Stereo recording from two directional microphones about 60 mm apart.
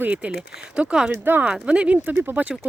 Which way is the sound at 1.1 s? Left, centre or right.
Right.